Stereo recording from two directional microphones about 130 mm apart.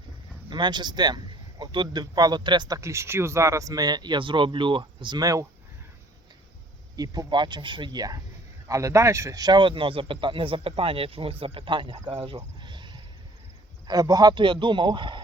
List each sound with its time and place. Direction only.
0.5 s a man's voice: 35° right (ahead or behind)
6.9 s a man's voice: 30° right (ahead or behind)
12.5 s a sound: 35° right (ahead or behind)
13.8 s a man's voice: 30° right (ahead or behind)